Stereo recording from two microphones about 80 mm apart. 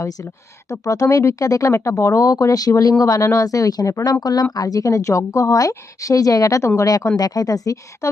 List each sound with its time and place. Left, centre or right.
0.0 s a woman's voice: left